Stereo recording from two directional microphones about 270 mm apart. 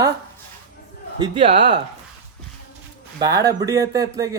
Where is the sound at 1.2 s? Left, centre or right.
Centre.